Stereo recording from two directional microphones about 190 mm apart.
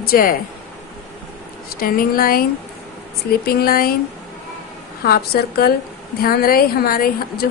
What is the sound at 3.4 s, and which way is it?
Speech, 55° left (ahead or behind).